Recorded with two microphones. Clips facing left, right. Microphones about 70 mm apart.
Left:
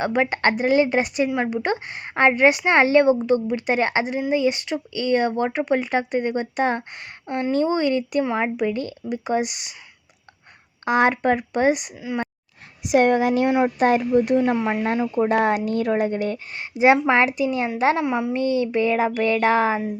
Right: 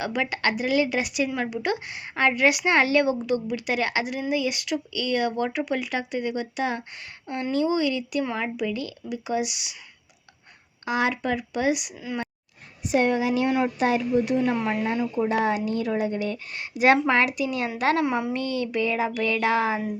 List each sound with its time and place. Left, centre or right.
0.0 s a woman's voice: left
10.8 s a woman's voice: left
13.1 s a woman's voice: left
18.0 s a woman's voice: centre
18.3 s speech: left